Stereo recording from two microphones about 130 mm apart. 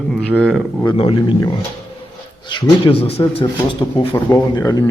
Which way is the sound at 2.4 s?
40° left (ahead or behind).